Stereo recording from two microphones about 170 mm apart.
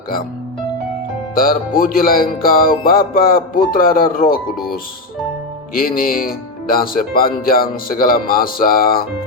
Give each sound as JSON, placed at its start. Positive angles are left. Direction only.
{"t": 1.4, "sound": "speech", "side_deg": 55}
{"t": 5.7, "sound": "speech", "side_deg": 60}